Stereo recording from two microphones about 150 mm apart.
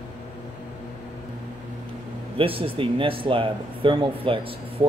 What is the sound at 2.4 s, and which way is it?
Speech, 35° right (ahead or behind).